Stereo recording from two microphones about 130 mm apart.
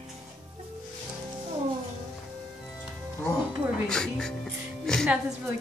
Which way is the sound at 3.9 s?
5° left (ahead or behind).